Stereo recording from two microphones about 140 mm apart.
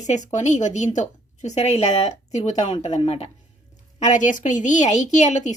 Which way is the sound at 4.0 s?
60° left (ahead or behind).